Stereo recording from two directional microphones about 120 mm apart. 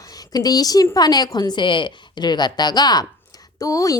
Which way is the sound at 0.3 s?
30° left (ahead or behind).